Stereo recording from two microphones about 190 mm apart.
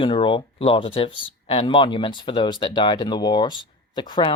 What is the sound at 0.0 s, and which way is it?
Speech, 25° left (ahead or behind).